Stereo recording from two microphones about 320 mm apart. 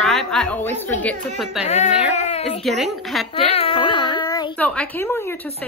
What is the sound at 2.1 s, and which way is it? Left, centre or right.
Baby cry, centre.